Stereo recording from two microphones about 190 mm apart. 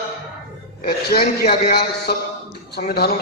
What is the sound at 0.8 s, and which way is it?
A man's voice, 55° left (ahead or behind).